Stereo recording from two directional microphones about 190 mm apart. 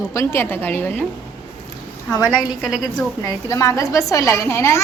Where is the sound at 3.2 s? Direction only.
15° left (ahead or behind).